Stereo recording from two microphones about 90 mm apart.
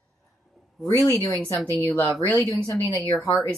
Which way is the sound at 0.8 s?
30° left (ahead or behind).